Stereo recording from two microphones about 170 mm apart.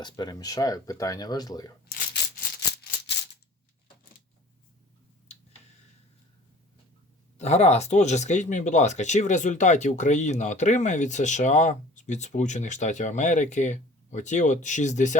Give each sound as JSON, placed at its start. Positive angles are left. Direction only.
{"t": 0.0, "sound": "speech", "side_deg": 25}
{"t": 7.3, "sound": "speech", "side_deg": 40}